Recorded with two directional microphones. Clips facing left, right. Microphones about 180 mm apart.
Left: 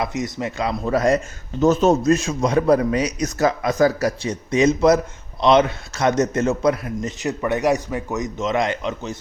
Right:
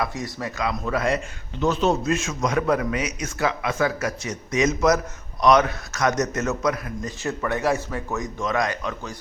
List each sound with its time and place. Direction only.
0.0 s a man's voice: 20° left (ahead or behind)